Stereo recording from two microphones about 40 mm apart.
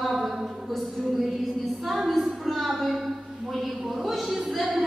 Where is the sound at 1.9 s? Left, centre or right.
Centre.